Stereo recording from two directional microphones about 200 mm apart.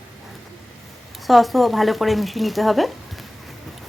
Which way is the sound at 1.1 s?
Centre (ahead or behind).